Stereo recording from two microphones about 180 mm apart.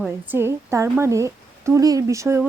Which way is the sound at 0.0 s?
10° right (ahead or behind).